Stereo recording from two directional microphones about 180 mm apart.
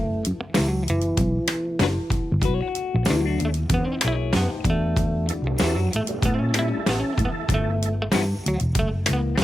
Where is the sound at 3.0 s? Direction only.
Centre (ahead or behind).